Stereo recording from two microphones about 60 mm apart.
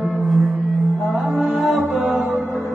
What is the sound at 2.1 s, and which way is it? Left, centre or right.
Music, right.